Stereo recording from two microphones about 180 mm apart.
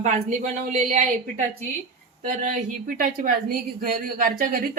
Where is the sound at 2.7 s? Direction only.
55° right (ahead or behind).